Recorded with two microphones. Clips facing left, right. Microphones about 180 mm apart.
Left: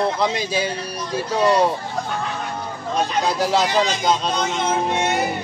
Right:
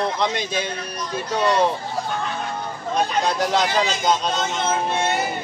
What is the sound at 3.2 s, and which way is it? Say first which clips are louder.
Speech: left 1 dB; 5° left (ahead or behind).